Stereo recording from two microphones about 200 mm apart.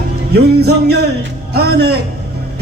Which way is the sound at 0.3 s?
55° right (ahead or behind).